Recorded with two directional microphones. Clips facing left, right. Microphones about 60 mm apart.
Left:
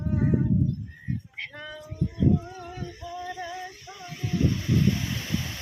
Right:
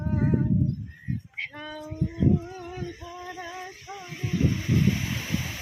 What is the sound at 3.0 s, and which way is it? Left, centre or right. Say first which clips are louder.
Female singing: left 3 dB; centre.